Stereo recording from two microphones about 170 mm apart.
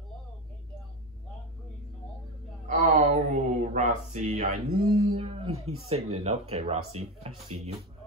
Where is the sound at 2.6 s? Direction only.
50° right (ahead or behind).